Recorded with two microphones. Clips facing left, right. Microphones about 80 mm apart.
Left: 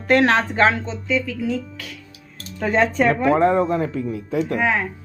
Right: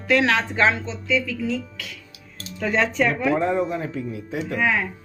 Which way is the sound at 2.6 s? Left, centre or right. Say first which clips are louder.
Left 3 dB; left.